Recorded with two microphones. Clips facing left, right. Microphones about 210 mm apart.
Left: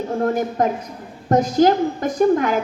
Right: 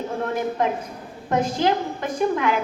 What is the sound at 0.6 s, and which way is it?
A woman's voice, 45° left (ahead or behind).